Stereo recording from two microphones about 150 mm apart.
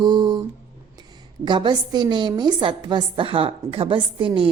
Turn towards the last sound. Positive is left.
turn(degrees=-35)  # may be behind; listen again after turning